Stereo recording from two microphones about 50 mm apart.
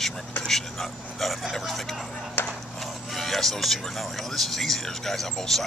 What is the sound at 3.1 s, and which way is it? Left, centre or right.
Speech, centre.